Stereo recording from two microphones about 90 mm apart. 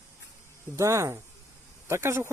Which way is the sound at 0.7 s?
35° right (ahead or behind).